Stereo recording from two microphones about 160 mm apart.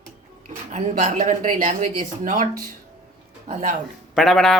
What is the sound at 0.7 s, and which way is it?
Speech, 45° right (ahead or behind).